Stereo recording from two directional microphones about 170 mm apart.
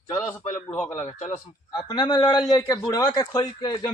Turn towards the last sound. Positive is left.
turn(degrees=20)  # may be behind; listen again after turning